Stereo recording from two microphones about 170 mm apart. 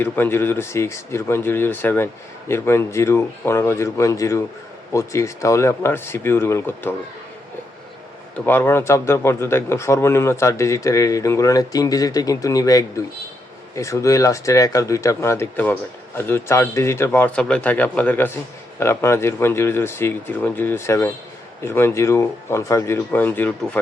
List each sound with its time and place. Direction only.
0.0 s speech: 15° left (ahead or behind)
8.4 s speech: 15° left (ahead or behind)